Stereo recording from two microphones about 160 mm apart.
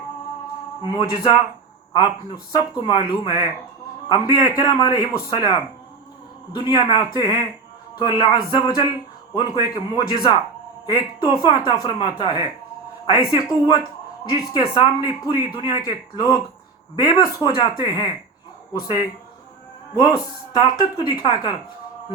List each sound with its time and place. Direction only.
0.8 s a man's voice: 25° left (ahead or behind)
20.0 s a man's voice: 25° left (ahead or behind)